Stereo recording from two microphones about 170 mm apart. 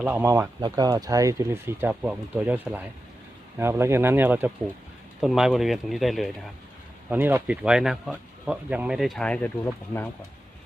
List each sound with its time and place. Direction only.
0.0 s speech: 10° right (ahead or behind)
0.6 s speech: 25° right (ahead or behind); by 6.3 s centre (ahead or behind)
7.1 s speech: 10° right (ahead or behind); by 9.5 s 5° left (ahead or behind)